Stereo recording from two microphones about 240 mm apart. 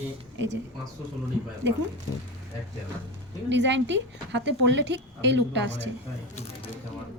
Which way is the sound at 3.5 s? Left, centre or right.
Right.